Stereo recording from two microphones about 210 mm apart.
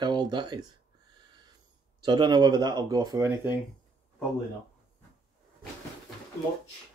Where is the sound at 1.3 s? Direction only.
20° right (ahead or behind).